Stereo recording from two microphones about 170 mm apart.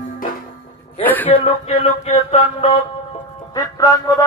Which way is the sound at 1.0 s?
10° left (ahead or behind).